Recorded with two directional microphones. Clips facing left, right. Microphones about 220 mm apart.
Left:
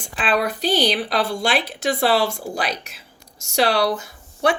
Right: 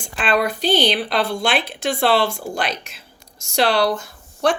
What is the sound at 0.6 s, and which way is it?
Speech, 5° left (ahead or behind).